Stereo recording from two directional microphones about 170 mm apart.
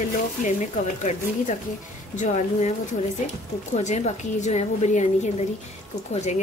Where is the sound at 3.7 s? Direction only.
40° left (ahead or behind).